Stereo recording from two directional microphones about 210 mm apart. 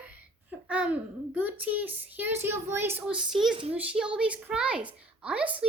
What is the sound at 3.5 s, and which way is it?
Speech, 25° right (ahead or behind).